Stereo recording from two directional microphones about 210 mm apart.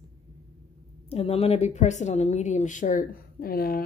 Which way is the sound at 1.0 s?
30° left (ahead or behind).